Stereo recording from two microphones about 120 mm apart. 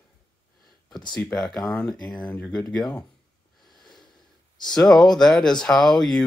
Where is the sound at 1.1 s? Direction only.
5° left (ahead or behind).